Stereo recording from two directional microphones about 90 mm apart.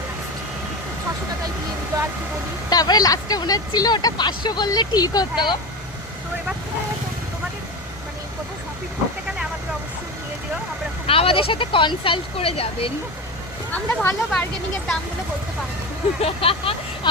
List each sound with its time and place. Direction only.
1.9 s vehicle: 35° right (ahead or behind)
2.6 s speech: 45° left (ahead or behind)
11.0 s speech: 90° left
13.7 s speech: 20° left (ahead or behind)
16.2 s speech: 90° left